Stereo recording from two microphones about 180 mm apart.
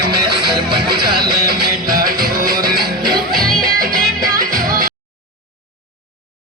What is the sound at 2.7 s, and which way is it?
Music, 25° right (ahead or behind).